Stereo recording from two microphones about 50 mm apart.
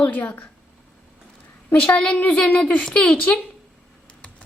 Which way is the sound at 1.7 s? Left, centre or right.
Left.